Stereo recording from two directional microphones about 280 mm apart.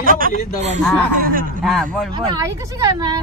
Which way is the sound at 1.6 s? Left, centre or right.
Centre.